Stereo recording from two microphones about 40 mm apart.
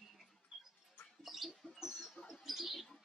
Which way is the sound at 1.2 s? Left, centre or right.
Centre.